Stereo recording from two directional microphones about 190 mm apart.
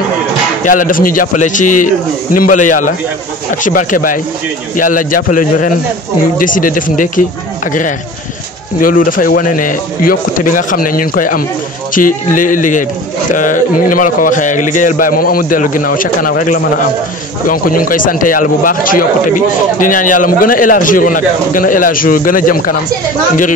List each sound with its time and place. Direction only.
0.7 s speech: 45° left (ahead or behind)